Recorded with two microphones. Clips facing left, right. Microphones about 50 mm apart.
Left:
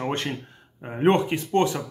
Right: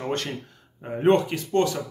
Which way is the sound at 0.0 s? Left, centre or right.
Left.